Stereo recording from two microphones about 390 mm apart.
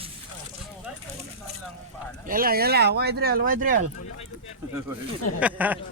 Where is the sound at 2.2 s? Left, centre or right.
Right.